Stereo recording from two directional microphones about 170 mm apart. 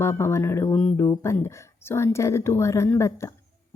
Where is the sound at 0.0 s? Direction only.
15° left (ahead or behind).